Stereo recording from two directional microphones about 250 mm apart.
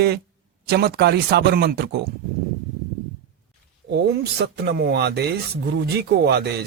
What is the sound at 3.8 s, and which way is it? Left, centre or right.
Speech, right.